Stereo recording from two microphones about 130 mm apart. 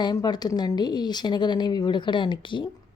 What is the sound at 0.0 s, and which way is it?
A woman's voice, 35° left (ahead or behind).